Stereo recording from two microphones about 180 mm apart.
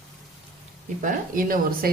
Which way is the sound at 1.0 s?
50° right (ahead or behind).